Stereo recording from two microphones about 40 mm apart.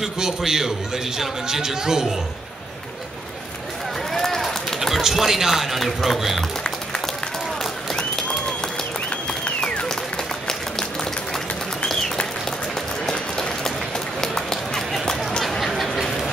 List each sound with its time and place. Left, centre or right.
0.0 s a man's voice: centre
4.1 s run: centre
4.8 s speech: centre
7.9 s applause: centre
13.0 s run: centre
14.2 s clip-clop: centre